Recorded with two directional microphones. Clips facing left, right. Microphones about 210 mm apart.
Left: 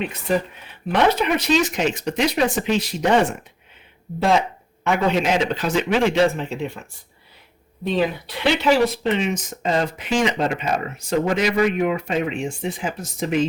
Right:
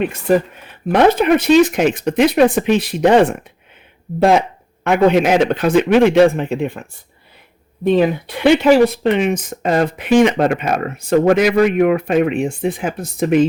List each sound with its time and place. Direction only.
0.0 s speech: 50° right (ahead or behind)
7.9 s speech: 50° right (ahead or behind)